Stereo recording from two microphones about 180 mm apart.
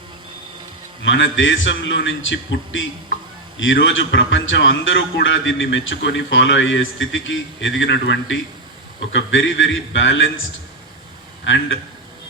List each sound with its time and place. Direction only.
1.0 s a man's voice: 90° left
9.1 s a man's voice: 90° left
11.4 s a man's voice: 90° left